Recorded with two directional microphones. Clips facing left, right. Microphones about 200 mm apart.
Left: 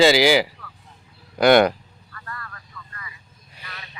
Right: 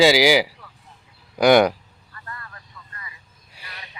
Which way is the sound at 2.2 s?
25° right (ahead or behind).